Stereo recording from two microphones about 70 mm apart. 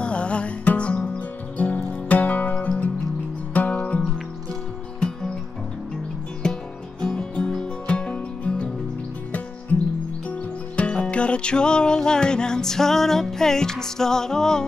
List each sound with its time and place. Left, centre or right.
0.0 s music: centre
6.4 s music: centre
10.8 s music: centre